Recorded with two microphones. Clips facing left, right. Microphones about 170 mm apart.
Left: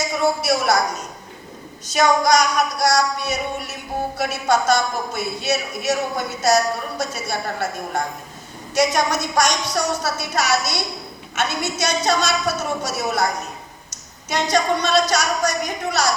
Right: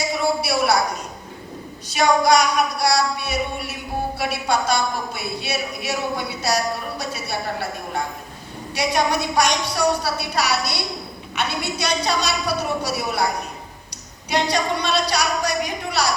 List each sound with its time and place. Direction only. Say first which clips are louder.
0.0 s a man's voice: left 1 dB; 45° left (ahead or behind)
1.9 s a man's voice: even; 45° left (ahead or behind)
14.5 s a man's voice: left 4 dB; 45° left (ahead or behind)